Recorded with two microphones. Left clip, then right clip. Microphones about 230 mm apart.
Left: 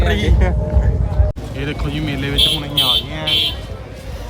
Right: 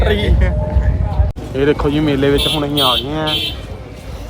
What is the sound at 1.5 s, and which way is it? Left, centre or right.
Speech, right.